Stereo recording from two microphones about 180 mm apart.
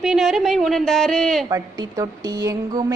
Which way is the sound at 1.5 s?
20° right (ahead or behind).